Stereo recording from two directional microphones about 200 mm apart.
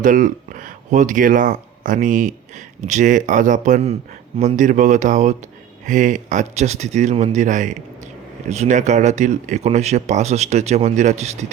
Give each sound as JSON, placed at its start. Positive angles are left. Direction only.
{"t": 0.0, "sound": "speech", "side_deg": -40}